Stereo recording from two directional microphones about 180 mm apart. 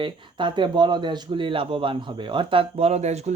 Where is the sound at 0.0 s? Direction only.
25° right (ahead or behind).